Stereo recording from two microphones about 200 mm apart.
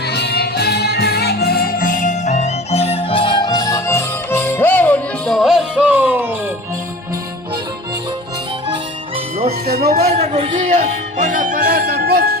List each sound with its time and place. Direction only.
0.1 s music: 55° left (ahead or behind); by 6.2 s 10° right (ahead or behind)
9.6 s a sound: 50° right (ahead or behind)
10.2 s music: 30° right (ahead or behind); by 12.4 s 50° right (ahead or behind)